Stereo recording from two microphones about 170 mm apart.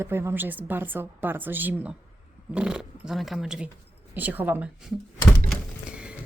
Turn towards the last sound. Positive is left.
turn(degrees=-5)  # may be behind; listen again after turning